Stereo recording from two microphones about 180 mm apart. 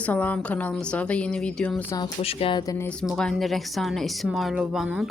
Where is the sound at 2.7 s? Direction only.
10° left (ahead or behind).